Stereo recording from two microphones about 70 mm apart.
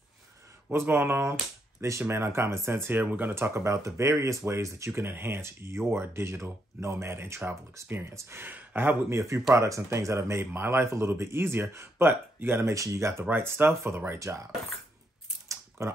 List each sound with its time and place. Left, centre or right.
0.7 s speech: right
3.4 s speech: right
9.1 s speech: right
12.7 s speech: right
13.2 s speech: right
15.4 s typing: right